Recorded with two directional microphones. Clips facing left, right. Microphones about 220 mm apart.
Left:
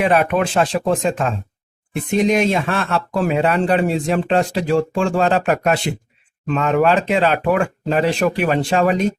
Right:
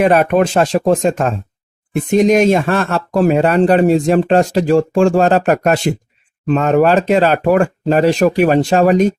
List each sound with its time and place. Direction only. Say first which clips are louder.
0.0 s speech: right 5 dB; 45° right (ahead or behind)